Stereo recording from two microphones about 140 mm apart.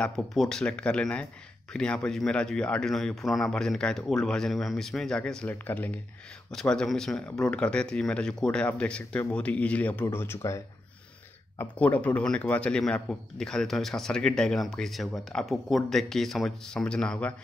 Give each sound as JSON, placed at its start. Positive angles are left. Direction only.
{"t": 0.0, "sound": "a man's voice", "side_deg": 5}
{"t": 11.8, "sound": "a man's voice", "side_deg": 10}